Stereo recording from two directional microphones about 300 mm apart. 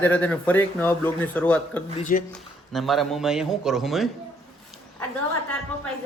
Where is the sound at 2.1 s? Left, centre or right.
Left.